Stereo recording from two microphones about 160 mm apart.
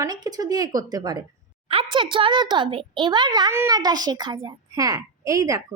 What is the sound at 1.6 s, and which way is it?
A child's voice, 35° right (ahead or behind).